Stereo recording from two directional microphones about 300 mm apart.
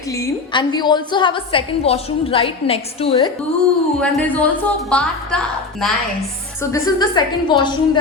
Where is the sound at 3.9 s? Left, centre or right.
Centre.